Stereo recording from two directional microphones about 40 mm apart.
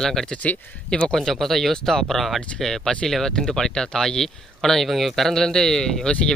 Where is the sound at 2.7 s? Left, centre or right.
Centre.